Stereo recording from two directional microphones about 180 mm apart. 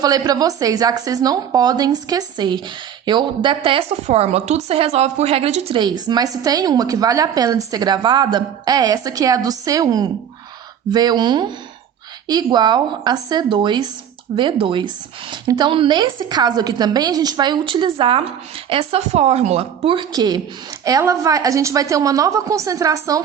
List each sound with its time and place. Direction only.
0.0 s a woman's voice: 20° right (ahead or behind)